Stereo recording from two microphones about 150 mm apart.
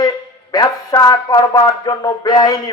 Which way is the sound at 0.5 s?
25° left (ahead or behind).